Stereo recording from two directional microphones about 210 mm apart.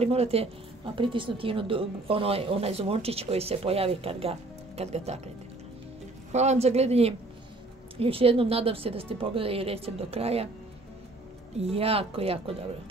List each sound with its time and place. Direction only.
0.0 s a woman's voice: 30° right (ahead or behind)
6.3 s a woman's voice: 30° right (ahead or behind)
11.5 s a woman's voice: 30° right (ahead or behind)